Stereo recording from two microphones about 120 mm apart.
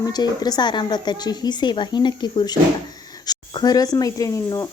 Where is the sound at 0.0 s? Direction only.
35° left (ahead or behind).